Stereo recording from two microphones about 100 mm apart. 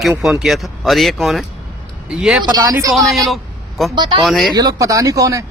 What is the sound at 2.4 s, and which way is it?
Speech, 45° right (ahead or behind).